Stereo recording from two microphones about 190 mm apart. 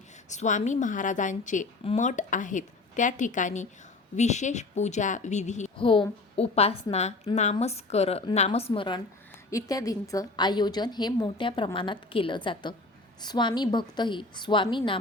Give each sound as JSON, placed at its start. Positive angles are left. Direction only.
{"t": 0.3, "sound": "a woman's voice", "side_deg": 40}